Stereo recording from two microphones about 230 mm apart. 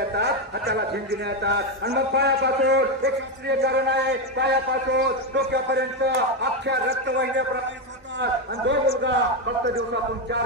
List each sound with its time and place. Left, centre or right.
0.1 s speech: right